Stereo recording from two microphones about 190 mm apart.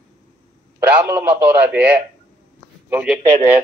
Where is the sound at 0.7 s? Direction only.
10° right (ahead or behind).